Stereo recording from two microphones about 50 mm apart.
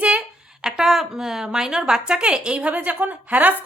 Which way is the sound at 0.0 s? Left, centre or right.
Right.